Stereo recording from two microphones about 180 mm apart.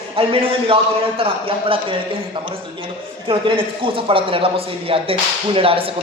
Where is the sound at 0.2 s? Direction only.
30° right (ahead or behind).